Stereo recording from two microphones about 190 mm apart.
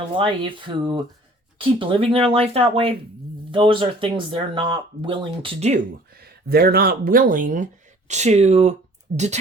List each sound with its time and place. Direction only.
0.2 s speech: 25° right (ahead or behind)
6.5 s speech: 55° right (ahead or behind); by 9.4 s 35° right (ahead or behind)